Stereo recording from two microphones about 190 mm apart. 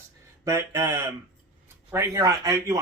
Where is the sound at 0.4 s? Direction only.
15° right (ahead or behind).